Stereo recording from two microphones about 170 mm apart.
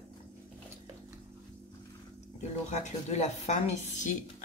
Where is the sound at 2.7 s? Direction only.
40° left (ahead or behind).